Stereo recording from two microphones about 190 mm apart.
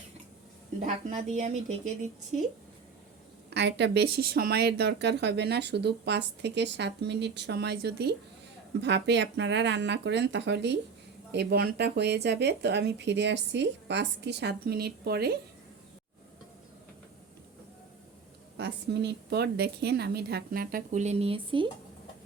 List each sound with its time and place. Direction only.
1.1 s speech: 40° right (ahead or behind)
3.5 s speech: 65° right (ahead or behind)
18.5 s speech: 60° right (ahead or behind); by 21.7 s 25° right (ahead or behind)